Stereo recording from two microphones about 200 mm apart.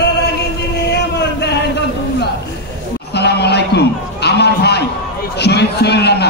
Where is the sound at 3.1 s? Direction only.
55° left (ahead or behind).